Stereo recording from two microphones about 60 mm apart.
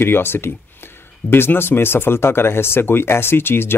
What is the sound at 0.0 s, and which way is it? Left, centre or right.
Speech, left.